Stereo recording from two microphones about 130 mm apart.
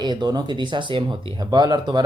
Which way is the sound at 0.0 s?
35° right (ahead or behind).